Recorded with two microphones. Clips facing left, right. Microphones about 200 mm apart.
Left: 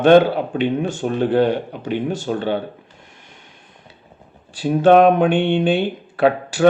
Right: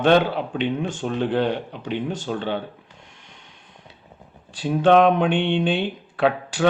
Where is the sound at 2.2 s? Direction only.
50° left (ahead or behind).